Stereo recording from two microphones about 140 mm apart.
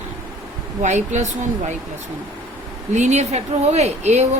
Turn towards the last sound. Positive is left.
turn(degrees=-50)  # may be behind; listen again after turning